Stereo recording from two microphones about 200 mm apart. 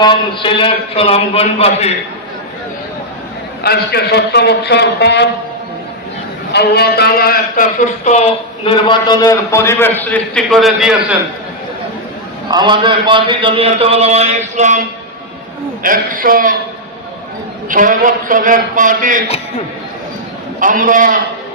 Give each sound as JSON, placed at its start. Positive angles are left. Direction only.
{"t": 0.0, "sound": "a man's voice", "side_deg": 25}
{"t": 3.6, "sound": "a man's voice", "side_deg": 50}
{"t": 6.5, "sound": "a man's voice", "side_deg": 55}
{"t": 12.5, "sound": "a man's voice", "side_deg": -20}
{"t": 17.7, "sound": "a man's voice", "side_deg": -40}
{"t": 20.6, "sound": "a man's voice", "side_deg": -40}